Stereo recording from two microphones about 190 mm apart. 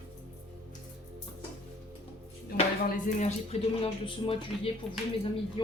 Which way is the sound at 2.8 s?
40° left (ahead or behind).